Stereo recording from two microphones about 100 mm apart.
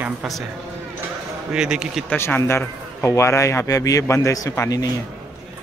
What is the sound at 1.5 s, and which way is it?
Speech, 10° right (ahead or behind).